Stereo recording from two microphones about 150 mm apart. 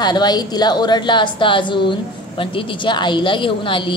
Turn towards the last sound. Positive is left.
turn(degrees=35)  # may be behind; listen again after turning